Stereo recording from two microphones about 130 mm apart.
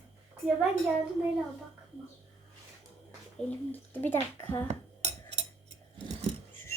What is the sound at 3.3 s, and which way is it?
A child's voice, 10° left (ahead or behind).